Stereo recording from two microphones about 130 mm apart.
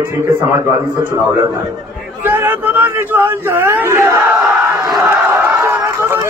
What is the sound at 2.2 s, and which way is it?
Speech, 15° right (ahead or behind).